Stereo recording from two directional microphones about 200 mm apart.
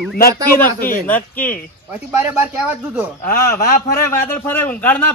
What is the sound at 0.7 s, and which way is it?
Speech, 45° left (ahead or behind).